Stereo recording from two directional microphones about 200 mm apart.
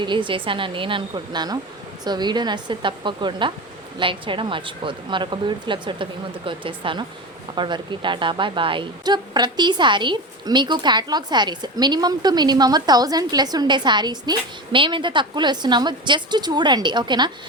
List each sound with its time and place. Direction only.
0.0 s a woman's voice: 25° right (ahead or behind)